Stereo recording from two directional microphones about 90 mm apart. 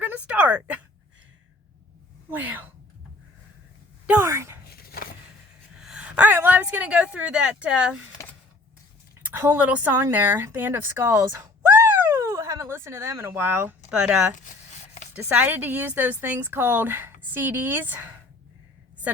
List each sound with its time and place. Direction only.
0.0 s a sound: 20° right (ahead or behind)
2.3 s a woman's voice: 20° right (ahead or behind)
4.2 s speech: 30° right (ahead or behind)
5.8 s speech: 10° right (ahead or behind)
9.2 s a woman's voice: 25° right (ahead or behind)
11.7 s a sound: 25° right (ahead or behind)
12.1 s speech: 40° right (ahead or behind)
13.9 s speech: 10° right (ahead or behind)
15.1 s a woman's voice: 25° right (ahead or behind)